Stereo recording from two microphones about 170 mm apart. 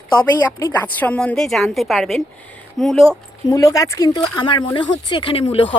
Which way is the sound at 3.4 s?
20° left (ahead or behind).